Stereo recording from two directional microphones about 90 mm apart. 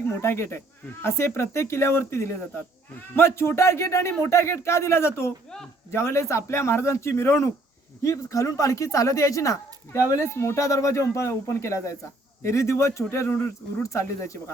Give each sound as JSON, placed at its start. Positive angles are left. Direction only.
{"t": 0.2, "sound": "speech", "side_deg": 30}